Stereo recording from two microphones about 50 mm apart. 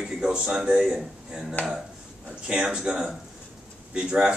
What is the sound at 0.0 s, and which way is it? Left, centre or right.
Speech, centre.